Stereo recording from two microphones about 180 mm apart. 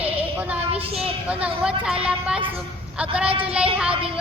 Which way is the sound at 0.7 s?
30° right (ahead or behind).